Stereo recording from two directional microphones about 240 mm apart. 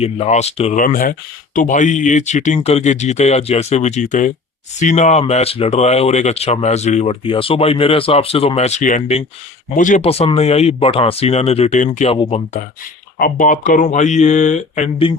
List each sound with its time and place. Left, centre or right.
0.0 s speech: left
13.1 s speech: left